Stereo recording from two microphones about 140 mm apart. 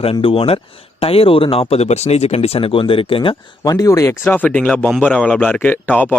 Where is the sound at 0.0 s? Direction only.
40° left (ahead or behind).